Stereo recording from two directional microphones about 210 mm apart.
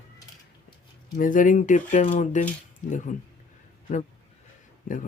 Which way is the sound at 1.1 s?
40° left (ahead or behind).